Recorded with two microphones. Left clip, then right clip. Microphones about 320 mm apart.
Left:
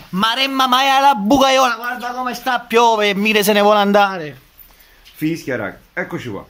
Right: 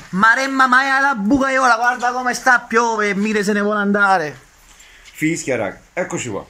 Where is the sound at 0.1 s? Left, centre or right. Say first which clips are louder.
Right 3 dB; centre.